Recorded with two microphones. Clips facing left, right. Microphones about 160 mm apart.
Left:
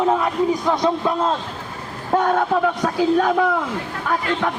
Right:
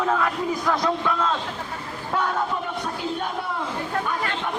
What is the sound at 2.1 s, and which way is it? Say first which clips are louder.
Speech: left 7 dB; 50° left (ahead or behind).